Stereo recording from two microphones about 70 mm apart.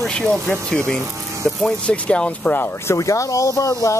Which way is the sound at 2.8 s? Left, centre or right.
Left.